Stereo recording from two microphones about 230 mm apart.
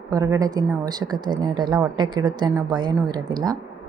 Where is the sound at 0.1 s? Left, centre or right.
Centre.